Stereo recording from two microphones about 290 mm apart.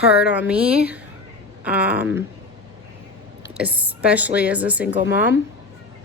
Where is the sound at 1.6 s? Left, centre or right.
Centre.